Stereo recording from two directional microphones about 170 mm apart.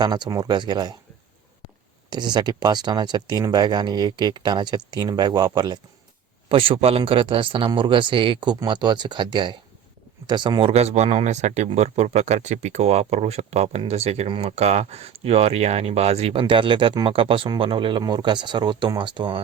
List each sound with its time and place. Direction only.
0.0 s speech: 25° right (ahead or behind)
2.0 s speech: 25° right (ahead or behind)